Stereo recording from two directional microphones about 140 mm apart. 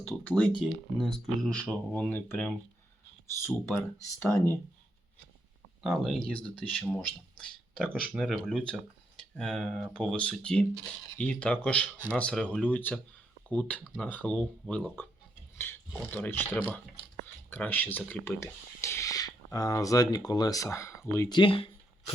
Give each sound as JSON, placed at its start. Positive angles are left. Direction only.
{"t": 0.0, "sound": "speech", "side_deg": 15}
{"t": 5.8, "sound": "speech", "side_deg": 0}
{"t": 21.3, "sound": "a sound", "side_deg": 40}